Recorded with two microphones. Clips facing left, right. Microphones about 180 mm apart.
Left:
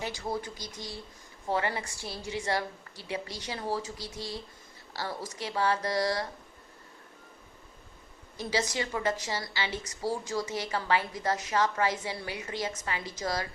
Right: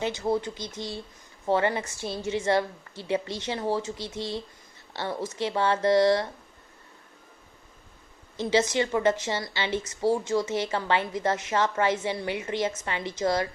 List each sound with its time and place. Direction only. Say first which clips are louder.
0.0 s a woman's voice: right 7 dB; 25° right (ahead or behind)
8.4 s a woman's voice: right 7 dB; 25° right (ahead or behind)